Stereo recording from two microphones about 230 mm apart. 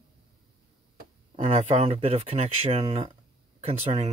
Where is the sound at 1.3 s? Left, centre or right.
Right.